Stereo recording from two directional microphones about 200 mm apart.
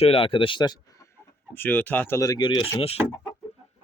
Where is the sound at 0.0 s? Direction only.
25° left (ahead or behind).